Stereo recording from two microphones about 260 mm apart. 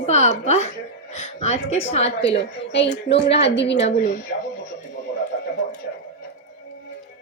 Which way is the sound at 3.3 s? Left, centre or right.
Left.